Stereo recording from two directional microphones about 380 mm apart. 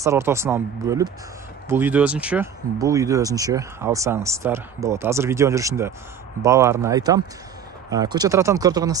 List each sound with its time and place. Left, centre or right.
0.0 s speech: centre